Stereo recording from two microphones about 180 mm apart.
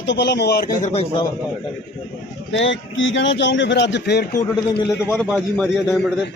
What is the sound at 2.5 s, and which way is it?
A man's voice, 90° left.